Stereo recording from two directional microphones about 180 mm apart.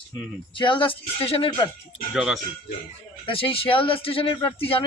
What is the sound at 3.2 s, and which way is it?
Speech, 30° left (ahead or behind).